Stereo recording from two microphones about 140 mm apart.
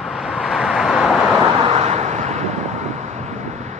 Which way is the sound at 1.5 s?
45° right (ahead or behind).